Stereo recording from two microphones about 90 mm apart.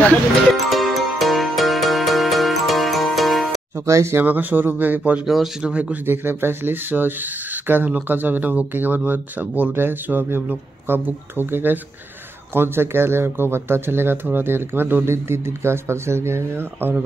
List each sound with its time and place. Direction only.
0.5 s music: centre (ahead or behind)
3.7 s speech: 30° right (ahead or behind)
5.2 s speech: 5° right (ahead or behind)
6.0 s speech: 25° right (ahead or behind)